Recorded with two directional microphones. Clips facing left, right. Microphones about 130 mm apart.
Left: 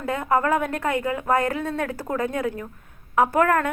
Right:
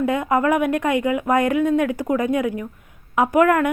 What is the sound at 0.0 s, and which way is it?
Speech, 20° right (ahead or behind).